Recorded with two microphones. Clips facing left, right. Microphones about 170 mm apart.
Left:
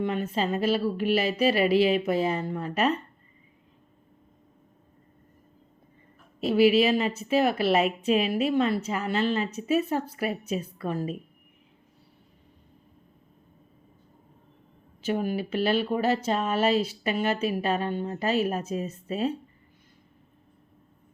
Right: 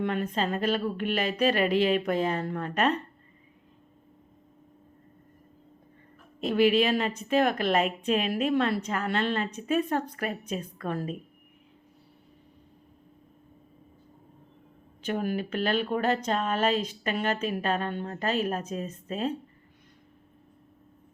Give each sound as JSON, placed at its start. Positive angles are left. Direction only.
{"t": 0.0, "sound": "speech", "side_deg": 5}
{"t": 6.4, "sound": "speech", "side_deg": 5}
{"t": 15.0, "sound": "speech", "side_deg": 5}